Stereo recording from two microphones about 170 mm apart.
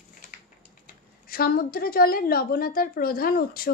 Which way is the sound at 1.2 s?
60° left (ahead or behind).